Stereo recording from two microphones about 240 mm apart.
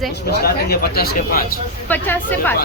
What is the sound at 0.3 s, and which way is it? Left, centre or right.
Speech, left.